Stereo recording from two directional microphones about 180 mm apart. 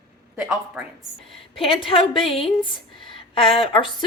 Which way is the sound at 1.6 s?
30° left (ahead or behind).